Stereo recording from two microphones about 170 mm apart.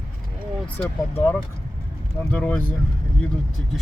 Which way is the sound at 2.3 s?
10° left (ahead or behind).